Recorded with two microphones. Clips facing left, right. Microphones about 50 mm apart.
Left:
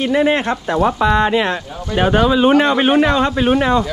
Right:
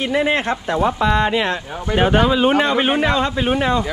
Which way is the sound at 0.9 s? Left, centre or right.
Left.